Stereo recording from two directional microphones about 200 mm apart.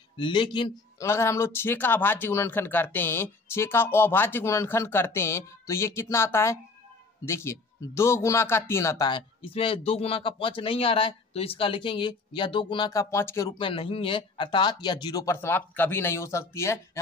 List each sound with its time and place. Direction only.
0.2 s speech: 25° left (ahead or behind)
1.0 s speech: 15° left (ahead or behind)
13.6 s speech: 25° left (ahead or behind)